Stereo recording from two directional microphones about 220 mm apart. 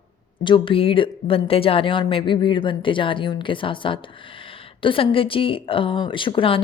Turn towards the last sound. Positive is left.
turn(degrees=25)  # may be behind; listen again after turning